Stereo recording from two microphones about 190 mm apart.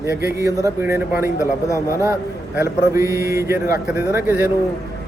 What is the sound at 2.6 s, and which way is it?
Speech, 15° right (ahead or behind).